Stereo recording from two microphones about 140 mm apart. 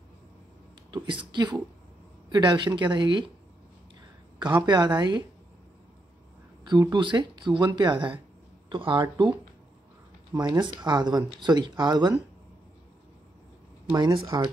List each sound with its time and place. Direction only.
0.9 s speech: 35° right (ahead or behind)
4.4 s speech: 30° right (ahead or behind)
6.6 s speech: 30° right (ahead or behind)
10.3 s speech: 30° right (ahead or behind)
13.9 s speech: 30° right (ahead or behind)